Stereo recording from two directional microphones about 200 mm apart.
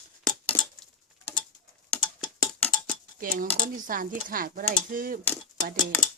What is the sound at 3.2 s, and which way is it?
Speech, 45° right (ahead or behind).